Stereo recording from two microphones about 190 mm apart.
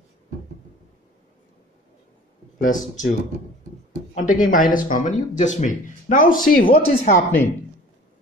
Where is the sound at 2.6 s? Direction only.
45° left (ahead or behind).